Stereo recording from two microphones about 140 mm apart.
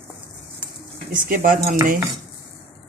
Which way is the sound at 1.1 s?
70° right (ahead or behind).